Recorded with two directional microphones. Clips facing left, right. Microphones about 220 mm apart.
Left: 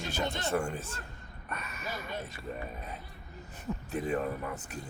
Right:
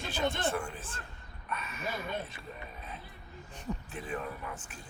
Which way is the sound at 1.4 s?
45° left (ahead or behind).